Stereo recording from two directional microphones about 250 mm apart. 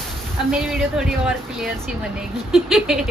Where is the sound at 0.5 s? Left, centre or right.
Centre.